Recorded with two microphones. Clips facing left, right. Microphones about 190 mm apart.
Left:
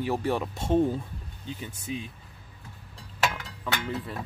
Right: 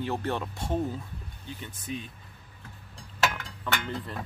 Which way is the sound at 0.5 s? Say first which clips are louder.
Left 6 dB; 25° left (ahead or behind).